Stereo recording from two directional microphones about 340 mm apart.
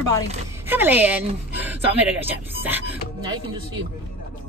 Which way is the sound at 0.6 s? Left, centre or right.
Centre.